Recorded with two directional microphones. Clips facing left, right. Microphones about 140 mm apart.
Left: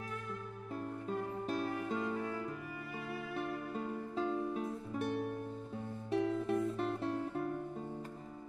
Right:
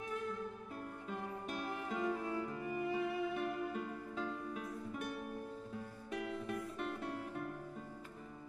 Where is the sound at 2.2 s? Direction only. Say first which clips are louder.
Right 1 dB; 25° right (ahead or behind).